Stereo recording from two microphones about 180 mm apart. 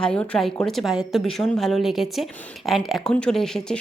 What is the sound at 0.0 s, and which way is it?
Speech, 5° left (ahead or behind).